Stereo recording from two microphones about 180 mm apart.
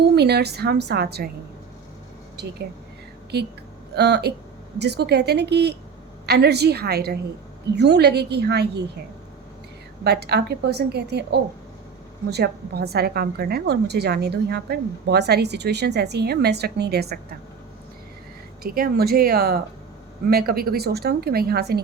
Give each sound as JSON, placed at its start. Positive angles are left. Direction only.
{"t": 0.2, "sound": "a woman's voice", "side_deg": -65}
{"t": 2.3, "sound": "a woman's voice", "side_deg": -65}
{"t": 3.9, "sound": "a woman's voice", "side_deg": -70}
{"t": 10.0, "sound": "a woman's voice", "side_deg": -65}
{"t": 18.6, "sound": "a woman's voice", "side_deg": -55}